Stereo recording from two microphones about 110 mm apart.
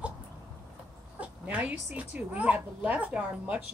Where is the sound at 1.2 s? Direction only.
10° right (ahead or behind).